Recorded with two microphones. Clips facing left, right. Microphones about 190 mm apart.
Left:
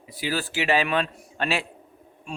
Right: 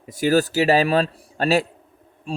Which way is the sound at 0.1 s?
45° right (ahead or behind).